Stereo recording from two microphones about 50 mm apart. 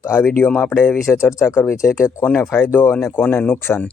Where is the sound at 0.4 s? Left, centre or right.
Left.